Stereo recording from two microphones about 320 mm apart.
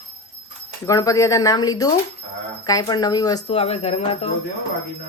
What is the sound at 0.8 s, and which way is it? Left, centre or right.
Speech, centre.